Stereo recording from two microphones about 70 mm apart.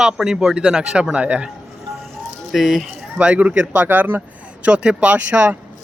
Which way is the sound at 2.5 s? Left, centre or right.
Centre.